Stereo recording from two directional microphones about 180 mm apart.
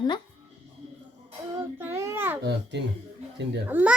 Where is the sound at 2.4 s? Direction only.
70° right (ahead or behind).